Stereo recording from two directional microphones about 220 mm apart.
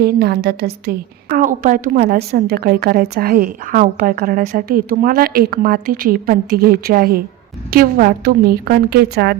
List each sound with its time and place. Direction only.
0.0 s a woman's voice: 45° right (ahead or behind)